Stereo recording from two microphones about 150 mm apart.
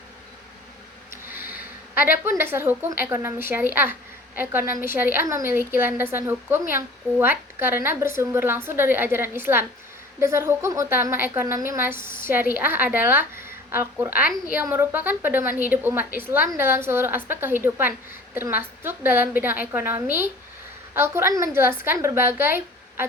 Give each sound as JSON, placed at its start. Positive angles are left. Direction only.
{"t": 1.3, "sound": "a sound", "side_deg": -15}
{"t": 2.4, "sound": "a woman's voice", "side_deg": -15}
{"t": 14.1, "sound": "a woman's voice", "side_deg": 75}
{"t": 14.5, "sound": "a woman's voice", "side_deg": -15}